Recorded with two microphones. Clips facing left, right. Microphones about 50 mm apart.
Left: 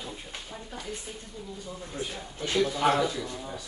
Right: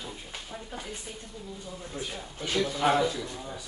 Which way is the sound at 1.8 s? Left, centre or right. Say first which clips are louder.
Left 1 dB; centre.